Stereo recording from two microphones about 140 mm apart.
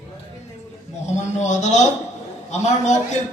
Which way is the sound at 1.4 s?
55° left (ahead or behind).